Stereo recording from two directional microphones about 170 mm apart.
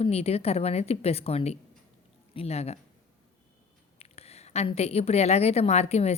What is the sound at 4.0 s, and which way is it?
A woman's voice, 35° left (ahead or behind).